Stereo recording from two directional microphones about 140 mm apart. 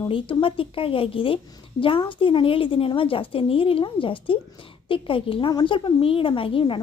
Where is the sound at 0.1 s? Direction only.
35° left (ahead or behind).